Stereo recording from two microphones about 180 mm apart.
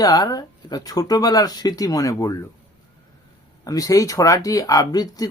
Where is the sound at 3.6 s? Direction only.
20° left (ahead or behind).